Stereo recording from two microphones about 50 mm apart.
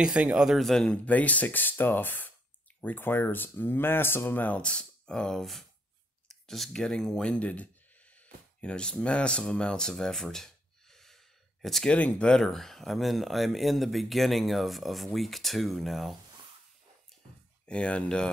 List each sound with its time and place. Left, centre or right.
0.0 s speech: right
1.0 s speech: left
4.6 s speech: left
5.4 s speech: centre; by 9.4 s left
9.4 s a sound: centre
11.8 s speech: left
12.3 s speech: centre
17.6 s speech: left